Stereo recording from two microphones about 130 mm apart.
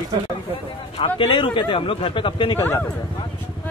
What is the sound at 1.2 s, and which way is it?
Speech, 45° left (ahead or behind).